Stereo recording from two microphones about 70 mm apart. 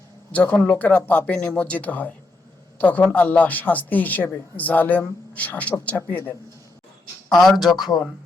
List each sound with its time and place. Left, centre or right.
0.3 s a woman's voice: left
7.3 s speech: centre